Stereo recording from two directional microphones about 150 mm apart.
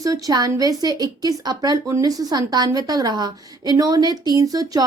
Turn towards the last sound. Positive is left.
turn(degrees=-25)  # may be behind; listen again after turning